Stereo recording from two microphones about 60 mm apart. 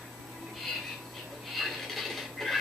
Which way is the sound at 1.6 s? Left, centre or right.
Centre.